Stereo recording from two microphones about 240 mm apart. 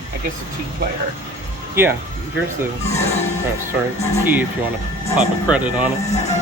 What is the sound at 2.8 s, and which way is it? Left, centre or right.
Speech, left.